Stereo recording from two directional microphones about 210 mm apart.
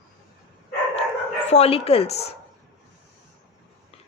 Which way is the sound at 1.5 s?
30° left (ahead or behind).